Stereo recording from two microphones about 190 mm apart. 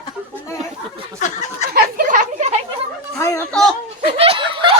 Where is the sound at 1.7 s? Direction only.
45° right (ahead or behind).